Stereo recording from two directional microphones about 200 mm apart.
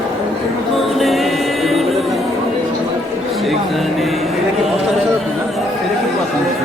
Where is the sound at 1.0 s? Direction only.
Centre (ahead or behind).